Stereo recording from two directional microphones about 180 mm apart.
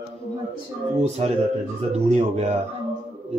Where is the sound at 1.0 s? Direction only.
35° right (ahead or behind).